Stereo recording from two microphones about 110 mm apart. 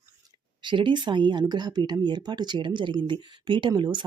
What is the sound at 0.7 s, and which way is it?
Speech, 45° right (ahead or behind).